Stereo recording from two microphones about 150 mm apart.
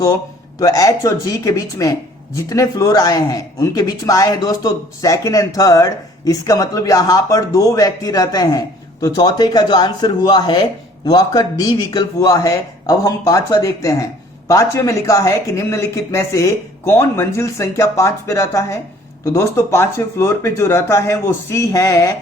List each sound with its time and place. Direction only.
0.6 s speech: 25° left (ahead or behind)